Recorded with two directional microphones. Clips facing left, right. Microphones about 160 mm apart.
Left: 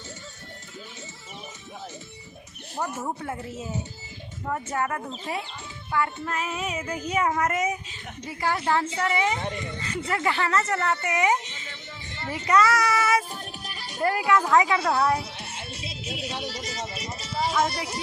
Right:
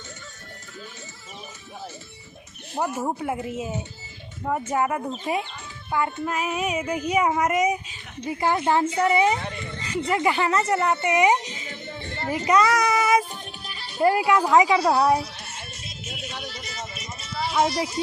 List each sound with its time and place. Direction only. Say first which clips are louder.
2.7 s a woman's voice: right 4 dB; 10° right (ahead or behind)
9.4 s speech: left 2 dB; 20° left (ahead or behind)
10.1 s a woman's voice: right 3 dB; 15° right (ahead or behind)
11.7 s music: right 7 dB; 55° right (ahead or behind)
12.5 s child singing: right 1 dB; 15° right (ahead or behind)
13.7 s music: left 1 dB; 15° left (ahead or behind)
14.0 s a woman's voice: right 3 dB; 20° right (ahead or behind)
15.4 s music: left 3 dB; 30° left (ahead or behind)
17.7 s speech: right 6 dB; 65° left (ahead or behind)